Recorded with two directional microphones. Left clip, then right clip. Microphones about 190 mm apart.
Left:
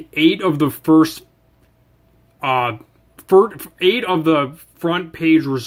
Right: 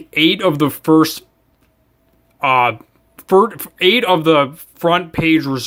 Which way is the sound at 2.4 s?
15° right (ahead or behind).